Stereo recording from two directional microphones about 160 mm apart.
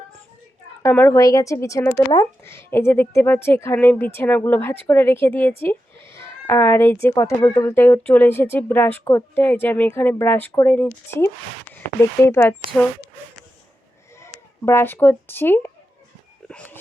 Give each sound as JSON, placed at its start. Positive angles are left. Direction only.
{"t": 0.8, "sound": "speech", "side_deg": 15}
{"t": 14.3, "sound": "speech", "side_deg": 15}